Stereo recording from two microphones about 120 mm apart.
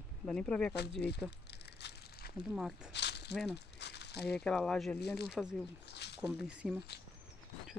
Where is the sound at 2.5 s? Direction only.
5° right (ahead or behind).